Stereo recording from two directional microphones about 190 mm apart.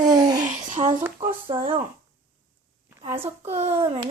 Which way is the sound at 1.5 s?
30° right (ahead or behind).